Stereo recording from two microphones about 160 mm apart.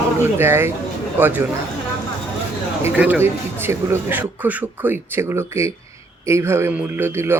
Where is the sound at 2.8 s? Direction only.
10° right (ahead or behind).